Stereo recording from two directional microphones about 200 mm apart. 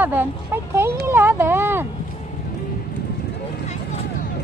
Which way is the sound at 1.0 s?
10° right (ahead or behind).